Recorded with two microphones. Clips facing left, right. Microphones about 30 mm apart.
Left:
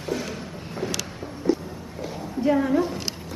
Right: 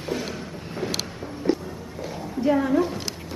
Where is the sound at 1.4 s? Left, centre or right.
Right.